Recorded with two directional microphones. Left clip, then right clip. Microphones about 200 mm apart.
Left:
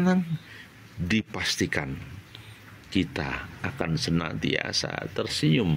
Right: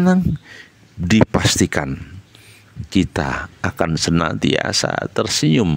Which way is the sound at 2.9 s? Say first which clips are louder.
Right 9 dB; 35° right (ahead or behind).